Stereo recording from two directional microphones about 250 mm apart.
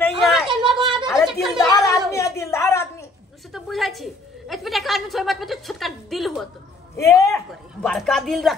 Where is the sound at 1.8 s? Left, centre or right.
Centre.